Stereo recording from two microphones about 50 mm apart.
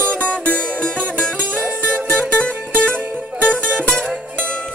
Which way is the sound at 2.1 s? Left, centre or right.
Left.